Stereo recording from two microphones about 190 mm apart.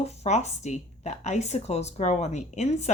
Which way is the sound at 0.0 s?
35° left (ahead or behind).